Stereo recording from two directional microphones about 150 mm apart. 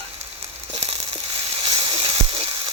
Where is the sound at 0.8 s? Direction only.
40° right (ahead or behind).